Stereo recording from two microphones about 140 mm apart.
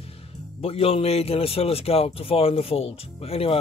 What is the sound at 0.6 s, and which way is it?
A man's voice, 45° left (ahead or behind).